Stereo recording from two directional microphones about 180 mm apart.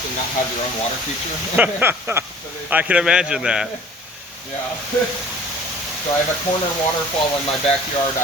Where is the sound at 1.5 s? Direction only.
10° right (ahead or behind).